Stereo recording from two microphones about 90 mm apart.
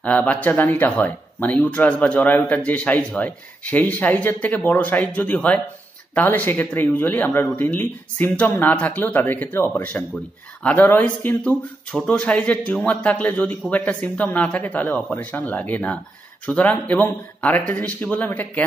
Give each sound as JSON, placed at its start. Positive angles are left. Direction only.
{"t": 0.0, "sound": "speech", "side_deg": 20}